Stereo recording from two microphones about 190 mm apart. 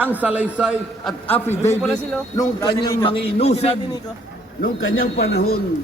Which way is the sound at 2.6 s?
25° left (ahead or behind).